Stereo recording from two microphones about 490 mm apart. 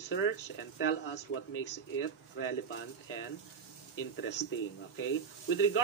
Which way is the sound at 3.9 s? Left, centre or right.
Left.